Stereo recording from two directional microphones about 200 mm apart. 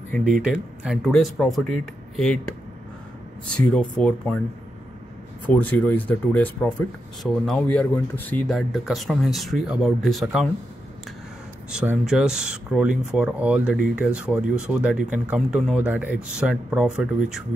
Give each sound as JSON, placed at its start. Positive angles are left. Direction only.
{"t": 0.1, "sound": "speech", "side_deg": 0}
{"t": 5.5, "sound": "speech", "side_deg": 10}
{"t": 11.7, "sound": "speech", "side_deg": -5}